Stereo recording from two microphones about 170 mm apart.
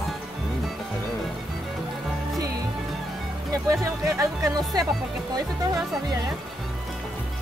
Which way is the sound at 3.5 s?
15° right (ahead or behind).